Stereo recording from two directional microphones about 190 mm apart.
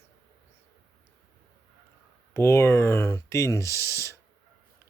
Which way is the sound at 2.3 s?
15° left (ahead or behind).